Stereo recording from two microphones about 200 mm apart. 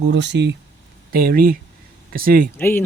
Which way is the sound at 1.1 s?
50° right (ahead or behind).